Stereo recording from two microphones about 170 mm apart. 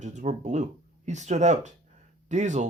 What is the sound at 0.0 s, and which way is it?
Speech, 45° right (ahead or behind).